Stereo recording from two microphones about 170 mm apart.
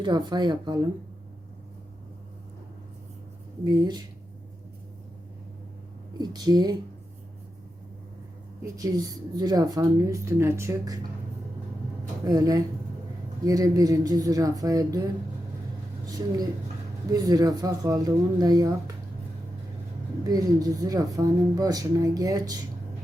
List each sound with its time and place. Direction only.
0.0 s speech: 25° right (ahead or behind)
3.7 s speech: 25° right (ahead or behind)
6.1 s speech: 25° right (ahead or behind)
8.6 s speech: 20° right (ahead or behind)
12.2 s speech: 20° right (ahead or behind)
20.2 s speech: 20° right (ahead or behind)